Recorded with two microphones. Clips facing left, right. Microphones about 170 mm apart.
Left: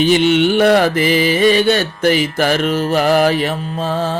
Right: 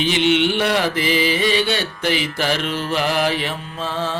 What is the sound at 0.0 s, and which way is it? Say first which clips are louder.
Mantra: left 5 dB; 45° left (ahead or behind).